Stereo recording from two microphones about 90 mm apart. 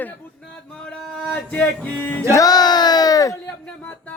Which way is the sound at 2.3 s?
45° left (ahead or behind).